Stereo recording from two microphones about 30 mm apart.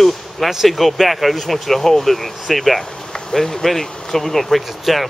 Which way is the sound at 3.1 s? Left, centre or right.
Left.